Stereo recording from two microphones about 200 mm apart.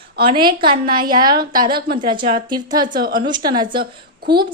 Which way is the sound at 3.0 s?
50° right (ahead or behind).